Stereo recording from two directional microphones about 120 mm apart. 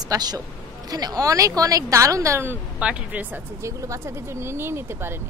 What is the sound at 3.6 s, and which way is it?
Speech, 25° right (ahead or behind).